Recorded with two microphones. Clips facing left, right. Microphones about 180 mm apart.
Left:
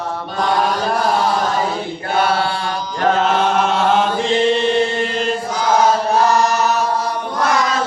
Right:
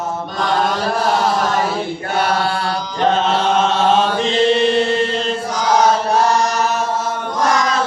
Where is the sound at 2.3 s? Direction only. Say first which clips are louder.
Right 1 dB; 40° right (ahead or behind).